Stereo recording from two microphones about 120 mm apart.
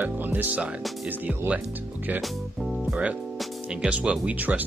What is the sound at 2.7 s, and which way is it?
Music, centre (ahead or behind).